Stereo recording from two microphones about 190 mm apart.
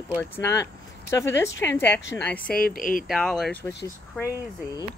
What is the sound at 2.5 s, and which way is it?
Speech, 50° left (ahead or behind).